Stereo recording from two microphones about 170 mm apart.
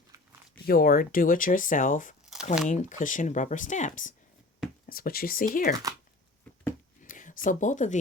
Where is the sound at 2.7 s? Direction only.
45° left (ahead or behind).